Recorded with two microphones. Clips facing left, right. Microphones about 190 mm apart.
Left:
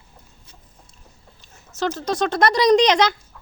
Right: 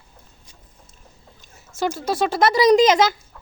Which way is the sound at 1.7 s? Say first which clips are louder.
Even; 10° right (ahead or behind).